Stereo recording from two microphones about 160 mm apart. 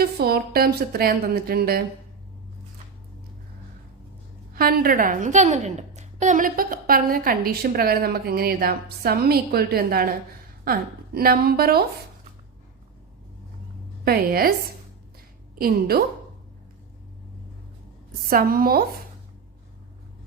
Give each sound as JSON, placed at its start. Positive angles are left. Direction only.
{"t": 0.0, "sound": "a woman's voice", "side_deg": -70}
{"t": 4.5, "sound": "a woman's voice", "side_deg": -65}
{"t": 14.0, "sound": "a woman's voice", "side_deg": -70}
{"t": 15.5, "sound": "a woman's voice", "side_deg": -70}
{"t": 18.3, "sound": "a woman's voice", "side_deg": -65}